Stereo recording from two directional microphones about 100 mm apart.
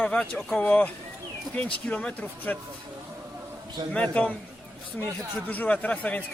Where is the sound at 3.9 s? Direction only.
10° left (ahead or behind).